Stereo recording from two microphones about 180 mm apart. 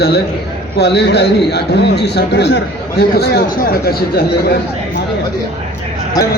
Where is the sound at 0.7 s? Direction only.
65° left (ahead or behind).